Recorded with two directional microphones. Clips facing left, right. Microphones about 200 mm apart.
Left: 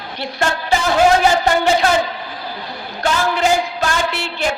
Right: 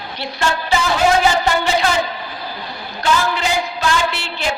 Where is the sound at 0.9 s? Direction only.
50° left (ahead or behind).